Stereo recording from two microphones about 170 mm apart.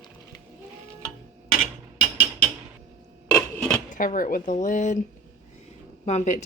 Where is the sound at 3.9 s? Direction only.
55° left (ahead or behind).